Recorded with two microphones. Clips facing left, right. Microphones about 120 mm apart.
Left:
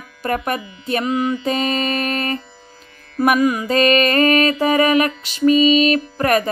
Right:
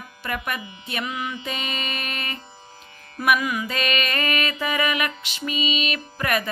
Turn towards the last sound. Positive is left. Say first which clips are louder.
# left 8 dB
turn(degrees=40)  # may be behind; listen again after turning